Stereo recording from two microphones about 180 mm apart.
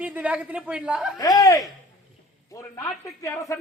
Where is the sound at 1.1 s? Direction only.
20° left (ahead or behind).